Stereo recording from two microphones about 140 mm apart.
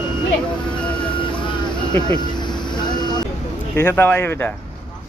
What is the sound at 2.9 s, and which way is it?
Vehicle, 30° left (ahead or behind).